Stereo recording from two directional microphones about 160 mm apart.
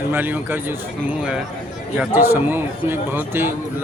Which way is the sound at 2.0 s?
15° right (ahead or behind).